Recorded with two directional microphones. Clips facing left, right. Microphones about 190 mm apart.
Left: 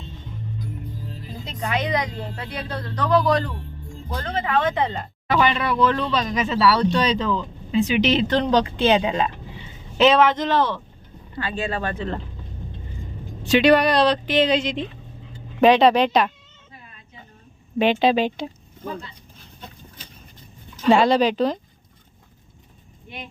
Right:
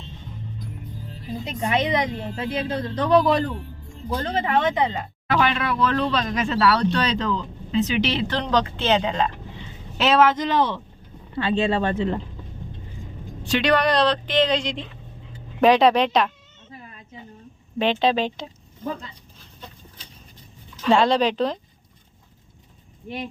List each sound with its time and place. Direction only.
1.5 s a woman's voice: 25° right (ahead or behind)
4.9 s speech: centre (ahead or behind)
10.0 s a woman's voice: 5° right (ahead or behind); by 12.2 s 20° right (ahead or behind)
13.4 s speech: 5° left (ahead or behind)
17.7 s speech: 10° left (ahead or behind)
20.9 s speech: 5° left (ahead or behind)